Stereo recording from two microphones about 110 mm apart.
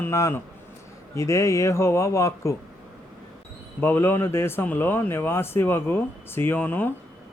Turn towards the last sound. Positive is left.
turn(degrees=20)  # may be behind; listen again after turning